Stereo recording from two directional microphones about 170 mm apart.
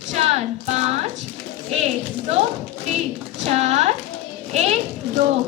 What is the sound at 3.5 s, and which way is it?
Speech, 40° right (ahead or behind).